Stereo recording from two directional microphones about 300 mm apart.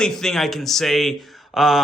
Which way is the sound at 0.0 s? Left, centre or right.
Centre.